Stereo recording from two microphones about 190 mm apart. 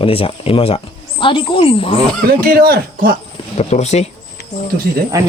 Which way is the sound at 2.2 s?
50° right (ahead or behind).